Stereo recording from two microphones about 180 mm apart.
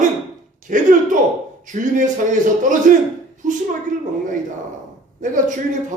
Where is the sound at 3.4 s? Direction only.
45° right (ahead or behind).